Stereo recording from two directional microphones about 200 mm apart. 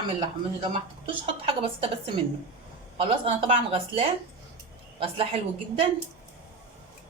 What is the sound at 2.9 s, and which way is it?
A woman's voice, 25° right (ahead or behind).